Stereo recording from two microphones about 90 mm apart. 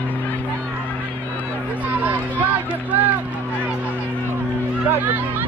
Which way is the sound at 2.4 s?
15° right (ahead or behind).